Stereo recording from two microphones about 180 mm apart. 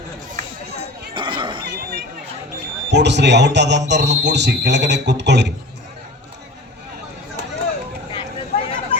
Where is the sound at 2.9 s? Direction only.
75° right (ahead or behind).